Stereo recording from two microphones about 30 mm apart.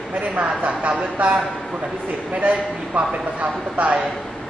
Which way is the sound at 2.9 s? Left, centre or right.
Right.